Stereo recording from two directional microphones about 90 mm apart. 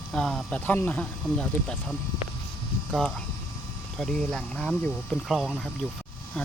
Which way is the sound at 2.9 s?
5° left (ahead or behind).